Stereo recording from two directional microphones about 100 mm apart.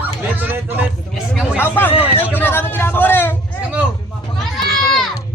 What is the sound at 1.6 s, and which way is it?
Speech, 20° left (ahead or behind).